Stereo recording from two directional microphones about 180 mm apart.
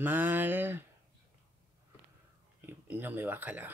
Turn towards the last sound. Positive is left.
turn(degrees=-10)  # may be behind; listen again after turning